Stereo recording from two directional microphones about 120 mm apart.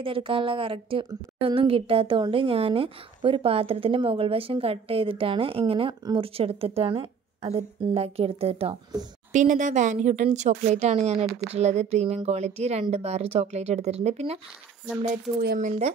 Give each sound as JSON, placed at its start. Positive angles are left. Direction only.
{"t": 0.0, "sound": "a woman's voice", "side_deg": -50}
{"t": 7.4, "sound": "speech", "side_deg": -60}
{"t": 9.3, "sound": "speech", "side_deg": -90}
{"t": 15.3, "sound": "speech", "side_deg": -80}